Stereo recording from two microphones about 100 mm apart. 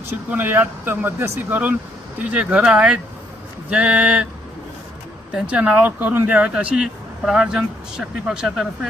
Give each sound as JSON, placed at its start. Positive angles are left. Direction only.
{"t": 0.3, "sound": "speech", "side_deg": -20}
{"t": 5.3, "sound": "speech", "side_deg": -10}